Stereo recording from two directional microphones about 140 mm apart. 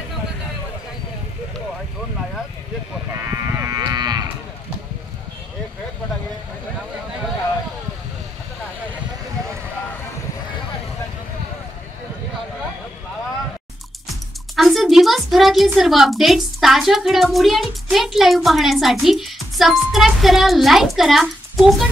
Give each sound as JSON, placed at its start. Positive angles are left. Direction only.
{"t": 3.2, "sound": "livestock", "side_deg": -20}
{"t": 14.5, "sound": "a woman's voice", "side_deg": 0}